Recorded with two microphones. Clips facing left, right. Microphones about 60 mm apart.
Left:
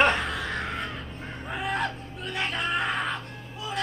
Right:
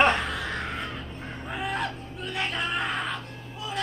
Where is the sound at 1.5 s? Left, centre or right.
Centre.